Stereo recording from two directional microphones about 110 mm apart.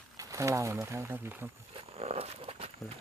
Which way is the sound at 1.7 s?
65° right (ahead or behind).